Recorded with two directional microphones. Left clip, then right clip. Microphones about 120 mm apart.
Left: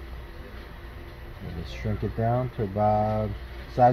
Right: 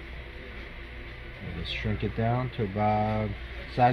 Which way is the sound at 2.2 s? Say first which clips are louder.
Left 4 dB; 20° left (ahead or behind).